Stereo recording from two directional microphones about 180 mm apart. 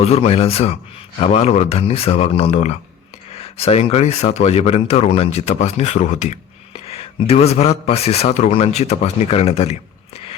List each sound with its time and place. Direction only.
0.0 s speech: 35° left (ahead or behind)